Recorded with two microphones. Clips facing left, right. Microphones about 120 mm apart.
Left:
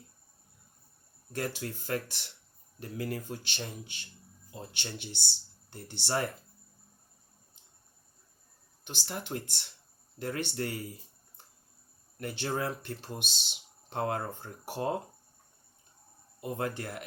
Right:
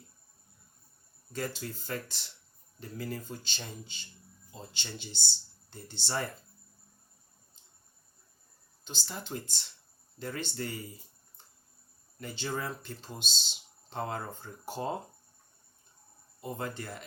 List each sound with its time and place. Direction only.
1.3 s speech: 60° left (ahead or behind)
8.8 s speech: 65° left (ahead or behind)
12.2 s speech: 60° left (ahead or behind)
16.4 s speech: 60° left (ahead or behind)